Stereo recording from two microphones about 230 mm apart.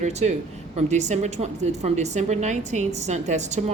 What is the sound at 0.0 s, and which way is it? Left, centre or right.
A woman's voice, right.